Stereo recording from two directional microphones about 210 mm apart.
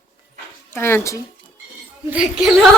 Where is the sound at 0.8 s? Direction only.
10° left (ahead or behind).